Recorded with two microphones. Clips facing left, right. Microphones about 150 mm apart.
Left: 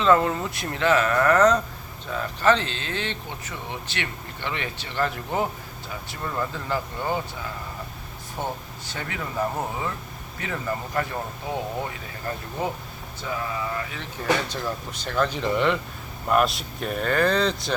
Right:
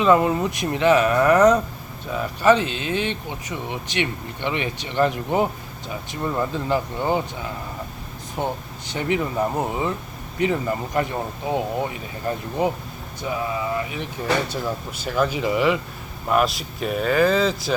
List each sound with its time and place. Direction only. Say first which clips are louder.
0.0 s speech: right 3 dB; 15° right (ahead or behind)
8.4 s speech: right 4 dB; 15° right (ahead or behind)